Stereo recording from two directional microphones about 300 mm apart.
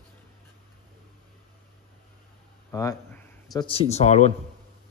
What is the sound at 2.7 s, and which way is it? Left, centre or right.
Speech, centre.